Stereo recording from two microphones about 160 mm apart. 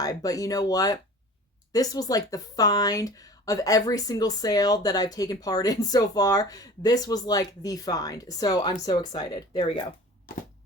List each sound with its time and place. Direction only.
0.0 s speech: 25° left (ahead or behind)
9.6 s speech: 35° left (ahead or behind)